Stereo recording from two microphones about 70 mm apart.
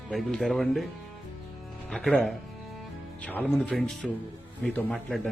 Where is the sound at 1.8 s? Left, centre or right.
Centre.